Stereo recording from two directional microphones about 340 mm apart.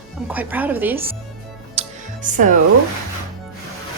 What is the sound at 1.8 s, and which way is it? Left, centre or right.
Music, centre.